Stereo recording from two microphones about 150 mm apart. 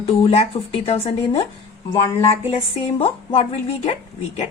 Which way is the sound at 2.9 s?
40° left (ahead or behind).